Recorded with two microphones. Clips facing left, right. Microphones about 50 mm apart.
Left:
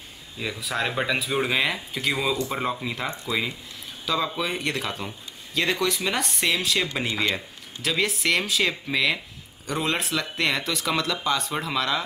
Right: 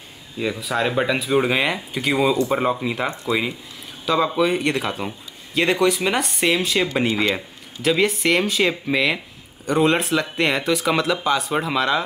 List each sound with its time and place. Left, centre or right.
0.4 s speech: centre
4.0 s speech: centre